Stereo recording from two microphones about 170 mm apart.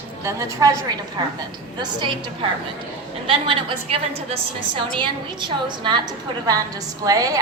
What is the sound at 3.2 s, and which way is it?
A woman's voice, 30° right (ahead or behind).